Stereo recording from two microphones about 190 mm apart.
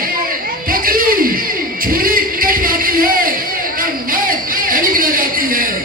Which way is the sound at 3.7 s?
50° right (ahead or behind).